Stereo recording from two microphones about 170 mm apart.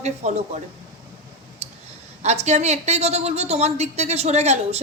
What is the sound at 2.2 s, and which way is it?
A woman's voice, 40° right (ahead or behind).